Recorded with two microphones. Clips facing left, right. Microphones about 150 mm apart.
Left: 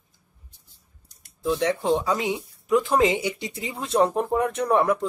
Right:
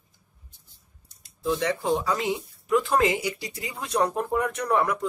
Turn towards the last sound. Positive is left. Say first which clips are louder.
# left 3 dB
turn(degrees=25)  # may be behind; listen again after turning